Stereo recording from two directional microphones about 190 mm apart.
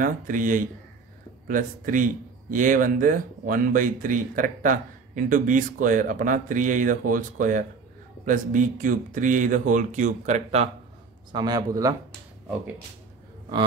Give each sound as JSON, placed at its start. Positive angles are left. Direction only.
{"t": 0.0, "sound": "speech", "side_deg": -45}
{"t": 11.3, "sound": "speech", "side_deg": -20}